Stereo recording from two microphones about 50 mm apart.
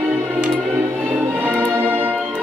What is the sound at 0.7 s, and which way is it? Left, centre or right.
Music, right.